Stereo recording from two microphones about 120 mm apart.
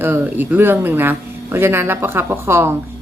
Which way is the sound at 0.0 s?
15° right (ahead or behind).